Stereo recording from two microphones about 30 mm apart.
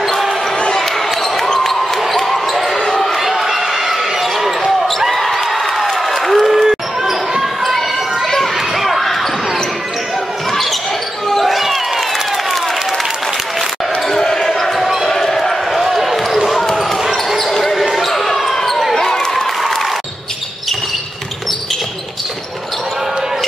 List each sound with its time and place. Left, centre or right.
0.0 s basketball bounce: centre
1.6 s basketball bounce: centre
3.0 s a sound: centre
4.2 s basketball bounce: centre
4.6 s basketball bounce: centre
5.1 s applause: centre
8.7 s basketball bounce: centre
11.2 s basketball bounce: centre
11.5 s a sound: centre
14.2 s basketball bounce: centre
15.7 s basketball bounce: centre